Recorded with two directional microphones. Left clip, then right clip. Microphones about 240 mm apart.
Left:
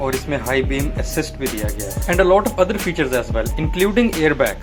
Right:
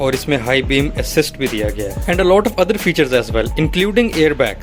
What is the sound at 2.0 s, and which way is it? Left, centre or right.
Speech, right.